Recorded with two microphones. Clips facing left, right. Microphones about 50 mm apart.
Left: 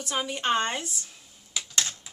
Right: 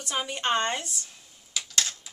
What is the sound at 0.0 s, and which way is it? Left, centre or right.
Speech, centre.